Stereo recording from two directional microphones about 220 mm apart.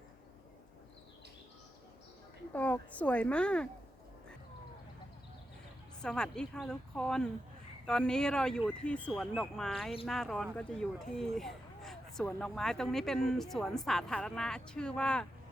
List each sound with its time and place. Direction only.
2.5 s speech: 5° left (ahead or behind)
6.0 s speech: 5° left (ahead or behind)